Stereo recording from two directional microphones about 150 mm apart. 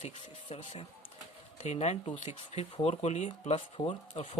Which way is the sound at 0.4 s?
40° left (ahead or behind).